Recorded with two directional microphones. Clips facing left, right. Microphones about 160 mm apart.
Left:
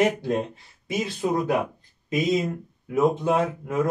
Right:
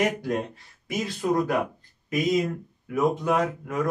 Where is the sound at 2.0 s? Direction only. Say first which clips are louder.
Even; 25° left (ahead or behind).